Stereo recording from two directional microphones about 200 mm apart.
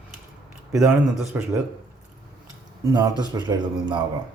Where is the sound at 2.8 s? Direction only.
15° right (ahead or behind).